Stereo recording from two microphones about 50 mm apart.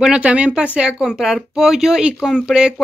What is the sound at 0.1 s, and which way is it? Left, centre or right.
A woman's voice, right.